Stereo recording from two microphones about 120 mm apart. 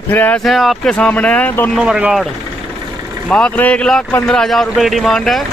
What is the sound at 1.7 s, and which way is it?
Speech, 5° right (ahead or behind).